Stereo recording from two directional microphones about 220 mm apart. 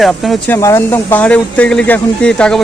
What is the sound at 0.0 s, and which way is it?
Speech, centre (ahead or behind).